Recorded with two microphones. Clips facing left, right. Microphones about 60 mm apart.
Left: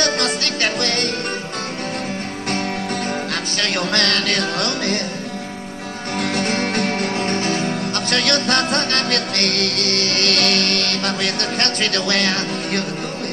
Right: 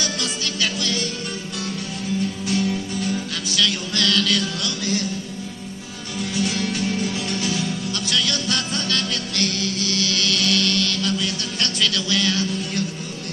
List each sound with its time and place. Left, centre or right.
0.0 s music: left
2.5 s music: left
6.1 s music: left